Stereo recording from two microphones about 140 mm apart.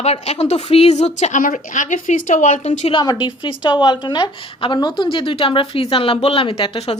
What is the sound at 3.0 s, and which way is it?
A woman's voice, 30° left (ahead or behind).